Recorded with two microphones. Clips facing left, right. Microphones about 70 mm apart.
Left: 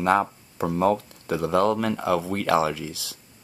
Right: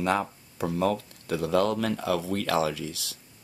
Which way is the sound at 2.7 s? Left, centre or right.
Right.